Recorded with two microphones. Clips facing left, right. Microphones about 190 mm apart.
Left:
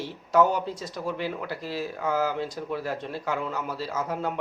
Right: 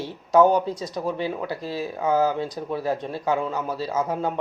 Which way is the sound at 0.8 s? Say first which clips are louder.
Right 4 dB; 20° right (ahead or behind).